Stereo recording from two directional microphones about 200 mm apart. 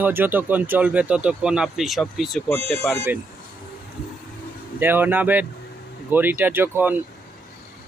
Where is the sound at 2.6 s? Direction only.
30° right (ahead or behind).